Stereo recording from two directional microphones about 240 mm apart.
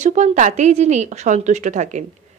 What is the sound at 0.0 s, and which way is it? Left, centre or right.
A woman's voice, right.